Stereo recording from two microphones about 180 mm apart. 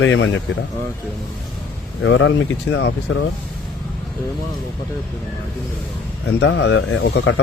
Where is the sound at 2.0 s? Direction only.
90° left.